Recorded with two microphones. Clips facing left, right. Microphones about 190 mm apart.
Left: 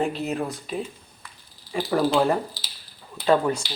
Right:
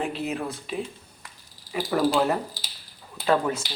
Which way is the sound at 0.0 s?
Centre (ahead or behind).